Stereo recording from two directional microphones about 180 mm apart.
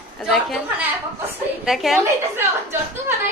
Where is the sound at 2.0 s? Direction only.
15° right (ahead or behind).